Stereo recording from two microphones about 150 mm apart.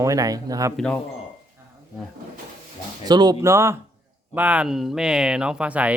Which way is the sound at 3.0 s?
25° right (ahead or behind).